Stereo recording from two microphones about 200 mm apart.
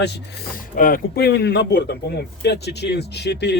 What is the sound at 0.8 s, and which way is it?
Speech, 45° left (ahead or behind).